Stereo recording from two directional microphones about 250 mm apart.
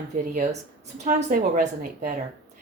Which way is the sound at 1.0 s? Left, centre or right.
Right.